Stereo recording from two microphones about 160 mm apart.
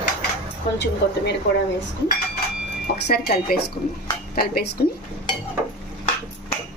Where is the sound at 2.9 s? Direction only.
90° left.